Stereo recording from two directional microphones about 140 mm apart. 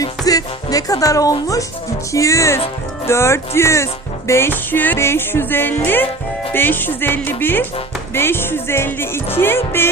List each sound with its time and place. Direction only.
0.0 s speech: 25° left (ahead or behind)
4.3 s music: 15° left (ahead or behind)